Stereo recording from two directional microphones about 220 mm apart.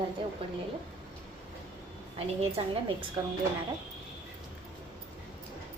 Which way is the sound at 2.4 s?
25° right (ahead or behind).